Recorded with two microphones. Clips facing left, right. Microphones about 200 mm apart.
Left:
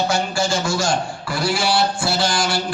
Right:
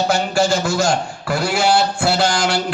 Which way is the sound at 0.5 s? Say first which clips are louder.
Right 3 dB; 60° right (ahead or behind).